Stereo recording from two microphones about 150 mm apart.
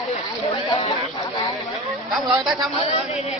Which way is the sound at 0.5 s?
40° left (ahead or behind).